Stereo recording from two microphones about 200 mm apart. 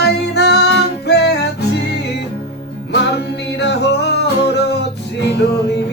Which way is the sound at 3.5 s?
60° left (ahead or behind).